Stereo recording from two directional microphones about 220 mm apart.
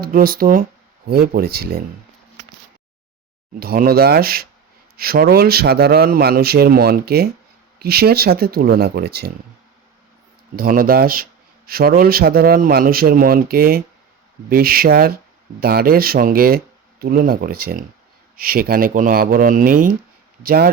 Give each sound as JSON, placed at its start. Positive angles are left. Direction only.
{"t": 0.0, "sound": "a man's voice", "side_deg": -40}
{"t": 3.5, "sound": "a man's voice", "side_deg": -40}
{"t": 10.5, "sound": "a man's voice", "side_deg": -40}